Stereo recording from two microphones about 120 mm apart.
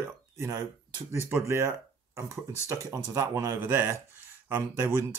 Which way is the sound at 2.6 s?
25° right (ahead or behind).